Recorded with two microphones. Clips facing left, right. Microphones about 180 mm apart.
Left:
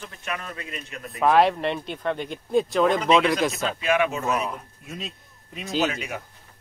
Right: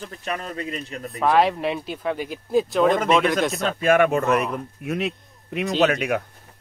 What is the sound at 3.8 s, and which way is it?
A man's voice, 50° right (ahead or behind).